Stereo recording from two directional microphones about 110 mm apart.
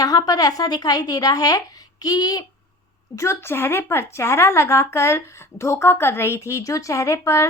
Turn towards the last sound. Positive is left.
turn(degrees=25)  # may be behind; listen again after turning